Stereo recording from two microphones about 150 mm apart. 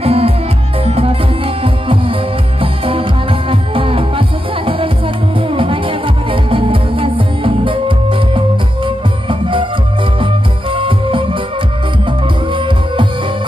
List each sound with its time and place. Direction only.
0.0 s music: 40° right (ahead or behind)
8.8 s music: 35° right (ahead or behind)
10.7 s music: 35° right (ahead or behind)
12.5 s music: 35° right (ahead or behind)